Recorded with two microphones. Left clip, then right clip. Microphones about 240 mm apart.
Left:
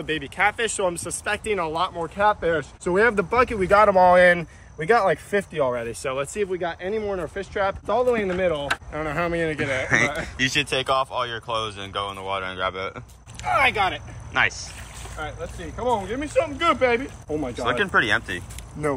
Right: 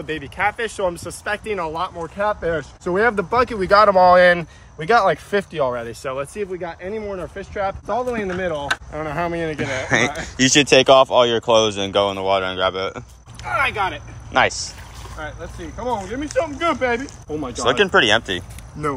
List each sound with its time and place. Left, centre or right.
0.0 s speech: centre
10.4 s speech: right; by 14.0 s centre
14.3 s speech: centre